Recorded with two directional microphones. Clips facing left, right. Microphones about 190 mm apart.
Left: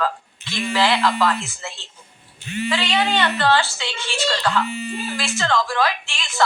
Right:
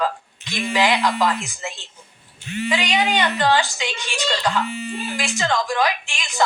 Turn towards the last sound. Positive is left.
turn(degrees=-15)  # may be behind; listen again after turning